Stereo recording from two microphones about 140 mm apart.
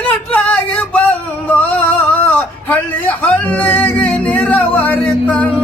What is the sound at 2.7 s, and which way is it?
Music, 10° left (ahead or behind).